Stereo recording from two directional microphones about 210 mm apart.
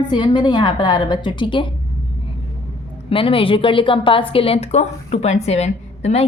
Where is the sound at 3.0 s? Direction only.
25° left (ahead or behind).